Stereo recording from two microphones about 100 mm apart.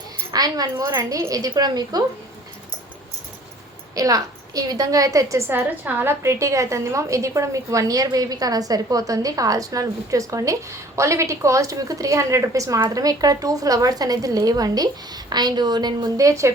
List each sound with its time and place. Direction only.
0.3 s a woman's voice: 40° right (ahead or behind)
3.9 s a woman's voice: 35° right (ahead or behind)
5.5 s a woman's voice: 20° right (ahead or behind); by 16.1 s 45° right (ahead or behind)
16.1 s a woman's voice: 30° right (ahead or behind)